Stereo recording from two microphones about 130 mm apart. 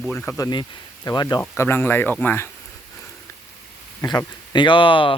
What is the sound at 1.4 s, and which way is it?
Speech, 15° left (ahead or behind).